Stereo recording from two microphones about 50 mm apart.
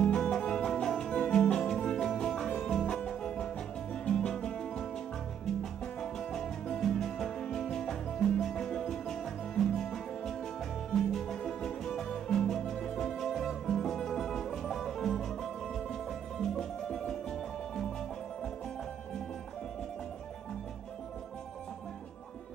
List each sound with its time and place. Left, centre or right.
0.0 s music: centre